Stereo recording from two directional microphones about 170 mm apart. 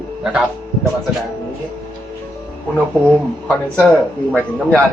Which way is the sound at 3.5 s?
Centre (ahead or behind).